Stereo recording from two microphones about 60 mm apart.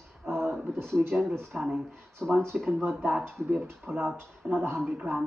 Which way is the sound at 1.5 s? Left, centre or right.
Centre.